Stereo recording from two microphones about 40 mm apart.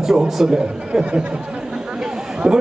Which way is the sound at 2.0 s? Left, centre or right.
Centre.